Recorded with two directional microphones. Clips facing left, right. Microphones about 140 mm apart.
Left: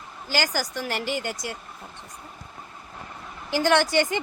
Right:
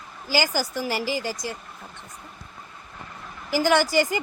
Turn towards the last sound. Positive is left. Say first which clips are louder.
# even
turn(degrees=0)  # may be behind; listen again after turning